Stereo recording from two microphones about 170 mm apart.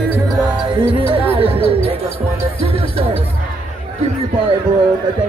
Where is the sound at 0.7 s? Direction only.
30° right (ahead or behind).